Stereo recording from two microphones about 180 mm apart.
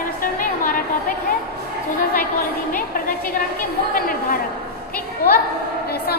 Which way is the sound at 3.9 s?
55° left (ahead or behind).